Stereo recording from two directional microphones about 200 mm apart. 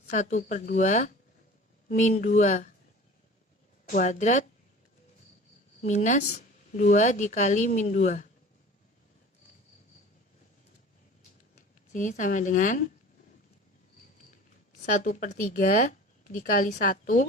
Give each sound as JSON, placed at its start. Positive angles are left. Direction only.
{"t": 0.1, "sound": "speech", "side_deg": 35}
{"t": 3.9, "sound": "speech", "side_deg": 40}
{"t": 5.8, "sound": "speech", "side_deg": 35}
{"t": 11.9, "sound": "speech", "side_deg": 40}
{"t": 14.9, "sound": "speech", "side_deg": 40}